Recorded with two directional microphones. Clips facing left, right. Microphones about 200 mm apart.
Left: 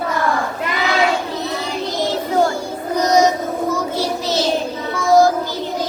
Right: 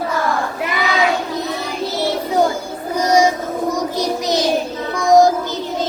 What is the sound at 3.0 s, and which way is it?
Child singing, 10° right (ahead or behind).